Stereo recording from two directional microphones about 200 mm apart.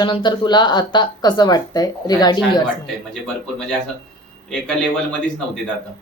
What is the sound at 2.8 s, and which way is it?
A man's voice, centre (ahead or behind).